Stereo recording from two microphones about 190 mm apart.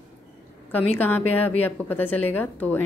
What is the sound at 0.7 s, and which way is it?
Speech, 10° left (ahead or behind).